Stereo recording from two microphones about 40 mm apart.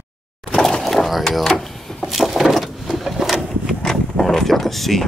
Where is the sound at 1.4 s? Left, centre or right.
Centre.